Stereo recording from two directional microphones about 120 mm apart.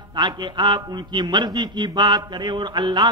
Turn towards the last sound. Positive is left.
turn(degrees=-35)  # may be behind; listen again after turning